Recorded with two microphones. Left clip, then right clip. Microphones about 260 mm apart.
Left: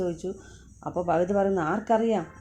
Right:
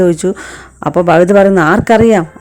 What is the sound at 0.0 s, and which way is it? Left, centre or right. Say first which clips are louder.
A man's voice: right 19 dB; right.